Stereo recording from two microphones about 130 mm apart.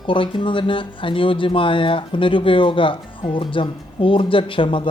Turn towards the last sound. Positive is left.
turn(degrees=40)  # may be behind; listen again after turning